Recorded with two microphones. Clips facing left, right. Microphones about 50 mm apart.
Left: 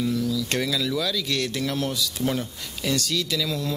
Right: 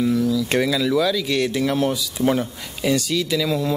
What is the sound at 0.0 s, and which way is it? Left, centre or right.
Speech, centre.